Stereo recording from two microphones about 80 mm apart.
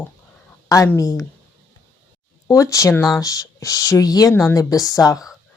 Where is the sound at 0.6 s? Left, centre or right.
Left.